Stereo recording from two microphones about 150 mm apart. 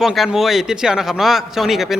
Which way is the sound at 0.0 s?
Centre (ahead or behind).